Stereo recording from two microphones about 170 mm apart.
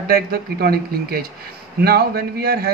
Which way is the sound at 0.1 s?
65° right (ahead or behind).